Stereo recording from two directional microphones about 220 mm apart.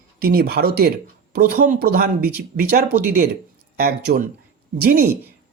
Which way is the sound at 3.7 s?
40° right (ahead or behind).